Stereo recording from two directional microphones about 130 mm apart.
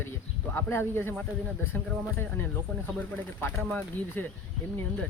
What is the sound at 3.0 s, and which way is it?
Speech, 15° left (ahead or behind).